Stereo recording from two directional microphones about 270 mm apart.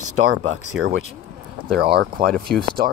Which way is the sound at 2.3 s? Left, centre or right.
Centre.